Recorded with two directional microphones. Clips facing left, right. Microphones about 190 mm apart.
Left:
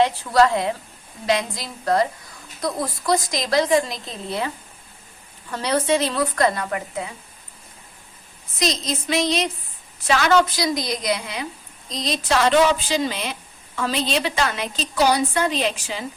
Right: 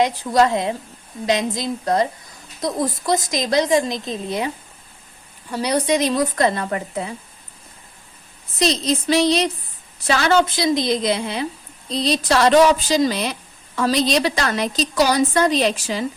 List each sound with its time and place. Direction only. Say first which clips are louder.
0.0 s a woman's voice: even; 15° right (ahead or behind); by 7.1 s 30° right (ahead or behind)
8.5 s a woman's voice: right 5 dB; 30° right (ahead or behind)